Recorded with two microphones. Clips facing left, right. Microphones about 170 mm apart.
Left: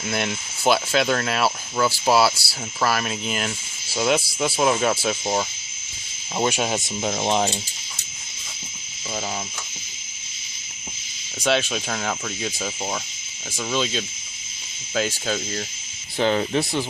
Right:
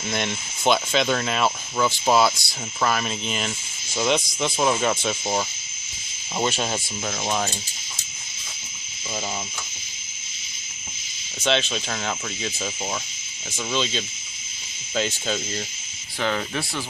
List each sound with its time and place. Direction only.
0.0 s speech: 5° left (ahead or behind)
6.7 s speech: 20° left (ahead or behind)
11.3 s speech: 10° left (ahead or behind)
16.1 s speech: 30° left (ahead or behind)